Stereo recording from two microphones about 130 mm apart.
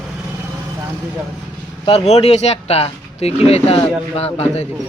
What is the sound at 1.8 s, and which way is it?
Speech, 50° left (ahead or behind).